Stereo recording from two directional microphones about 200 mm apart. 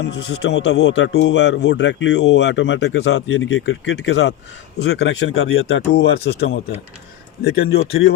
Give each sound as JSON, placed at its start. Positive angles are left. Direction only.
{"t": 0.0, "sound": "speech", "side_deg": 55}